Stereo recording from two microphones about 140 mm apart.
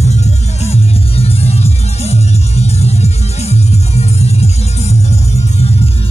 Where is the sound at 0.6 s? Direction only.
45° left (ahead or behind).